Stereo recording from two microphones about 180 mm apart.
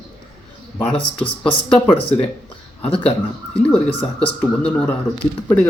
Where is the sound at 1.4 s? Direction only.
30° left (ahead or behind).